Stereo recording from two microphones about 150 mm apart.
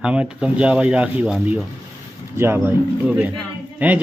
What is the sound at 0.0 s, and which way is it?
Speech, 5° right (ahead or behind).